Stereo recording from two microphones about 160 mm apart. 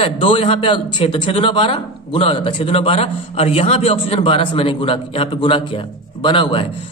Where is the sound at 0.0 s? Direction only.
35° left (ahead or behind).